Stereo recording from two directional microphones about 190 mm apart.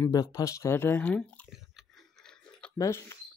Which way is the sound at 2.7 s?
15° left (ahead or behind).